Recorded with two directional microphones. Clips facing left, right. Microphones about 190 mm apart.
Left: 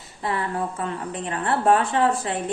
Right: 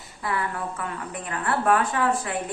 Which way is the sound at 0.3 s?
25° left (ahead or behind).